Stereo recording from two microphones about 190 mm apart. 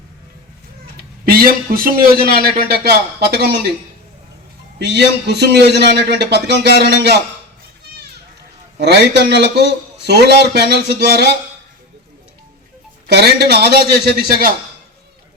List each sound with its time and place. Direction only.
1.2 s a man's voice: 50° right (ahead or behind)
4.8 s a man's voice: 60° right (ahead or behind)
6.7 s a man's voice: 60° left (ahead or behind)
6.9 s a man's voice: 60° right (ahead or behind)
8.8 s a man's voice: 60° right (ahead or behind)
13.1 s a man's voice: 60° right (ahead or behind)